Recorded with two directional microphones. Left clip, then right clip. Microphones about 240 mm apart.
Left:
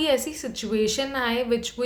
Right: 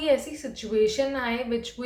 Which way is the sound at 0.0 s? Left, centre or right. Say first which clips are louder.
Left 1 dB; left.